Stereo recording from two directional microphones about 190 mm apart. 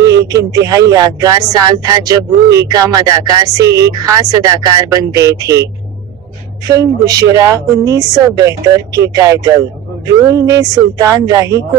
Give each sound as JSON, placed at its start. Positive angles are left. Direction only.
{"t": 0.3, "sound": "speech", "side_deg": -20}
{"t": 3.6, "sound": "speech", "side_deg": -65}
{"t": 3.9, "sound": "speech", "side_deg": -20}
{"t": 6.7, "sound": "speech", "side_deg": -20}